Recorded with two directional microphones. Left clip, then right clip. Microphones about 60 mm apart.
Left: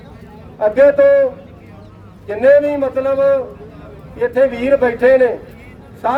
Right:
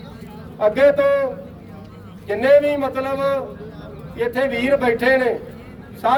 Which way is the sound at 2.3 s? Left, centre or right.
Left.